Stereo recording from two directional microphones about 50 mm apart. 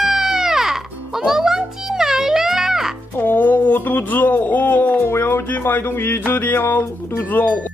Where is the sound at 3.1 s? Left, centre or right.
Left.